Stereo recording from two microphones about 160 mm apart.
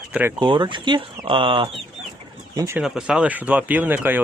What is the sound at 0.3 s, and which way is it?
Speech, 30° right (ahead or behind).